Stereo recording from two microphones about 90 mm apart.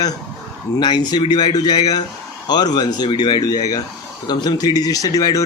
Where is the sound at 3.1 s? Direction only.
60° left (ahead or behind).